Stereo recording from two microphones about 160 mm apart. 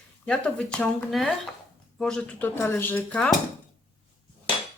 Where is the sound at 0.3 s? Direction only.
5° left (ahead or behind).